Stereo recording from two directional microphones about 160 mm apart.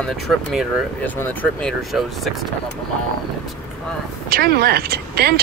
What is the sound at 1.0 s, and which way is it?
Speech, 10° left (ahead or behind).